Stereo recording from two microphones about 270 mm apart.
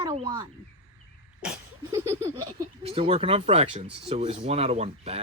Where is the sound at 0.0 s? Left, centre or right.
Centre.